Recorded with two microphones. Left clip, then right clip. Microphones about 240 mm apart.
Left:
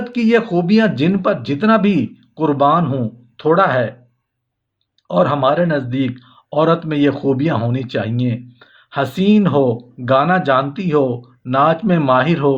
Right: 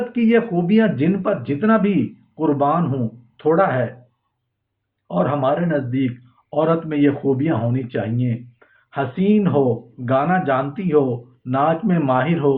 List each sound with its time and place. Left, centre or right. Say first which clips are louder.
0.1 s speech: left 4 dB; left
5.0 s speech: left 5 dB; left